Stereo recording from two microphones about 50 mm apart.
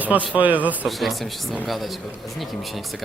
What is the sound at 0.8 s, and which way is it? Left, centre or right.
Speech, centre.